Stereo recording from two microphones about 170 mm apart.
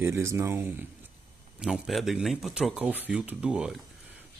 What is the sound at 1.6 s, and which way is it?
Speech, 5° right (ahead or behind).